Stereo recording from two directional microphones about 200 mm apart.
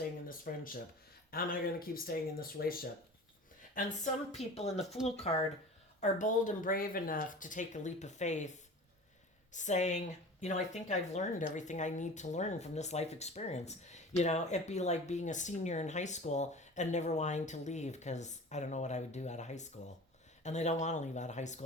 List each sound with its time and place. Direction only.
0.3 s speech: 45° left (ahead or behind)